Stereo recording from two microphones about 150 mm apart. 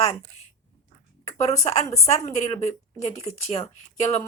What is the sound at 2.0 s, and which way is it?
A woman's voice, 50° left (ahead or behind).